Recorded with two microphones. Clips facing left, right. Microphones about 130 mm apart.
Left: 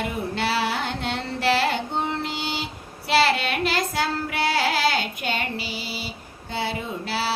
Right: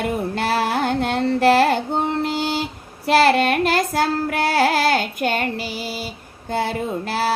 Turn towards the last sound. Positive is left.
turn(degrees=-50)  # may be behind; listen again after turning